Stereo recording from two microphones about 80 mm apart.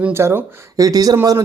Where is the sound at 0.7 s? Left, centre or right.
Right.